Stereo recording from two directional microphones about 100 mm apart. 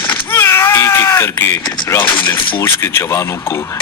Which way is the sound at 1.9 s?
25° left (ahead or behind).